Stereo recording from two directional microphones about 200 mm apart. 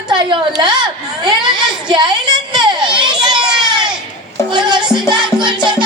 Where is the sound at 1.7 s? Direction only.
20° right (ahead or behind).